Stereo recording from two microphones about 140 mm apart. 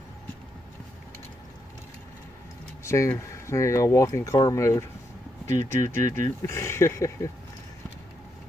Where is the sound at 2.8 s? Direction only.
20° left (ahead or behind).